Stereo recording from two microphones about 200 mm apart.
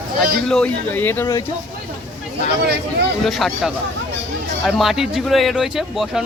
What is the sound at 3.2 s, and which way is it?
A man's voice, centre (ahead or behind).